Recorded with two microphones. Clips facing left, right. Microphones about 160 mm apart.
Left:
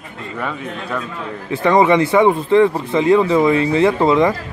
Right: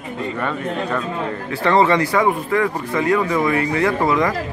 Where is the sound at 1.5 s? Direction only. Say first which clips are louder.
Left 3 dB; 15° left (ahead or behind).